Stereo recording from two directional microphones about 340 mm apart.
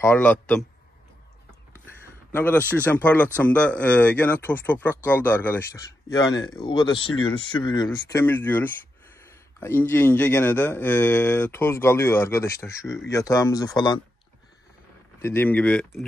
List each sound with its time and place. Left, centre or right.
0.0 s speech: centre
2.3 s speech: centre
15.2 s speech: centre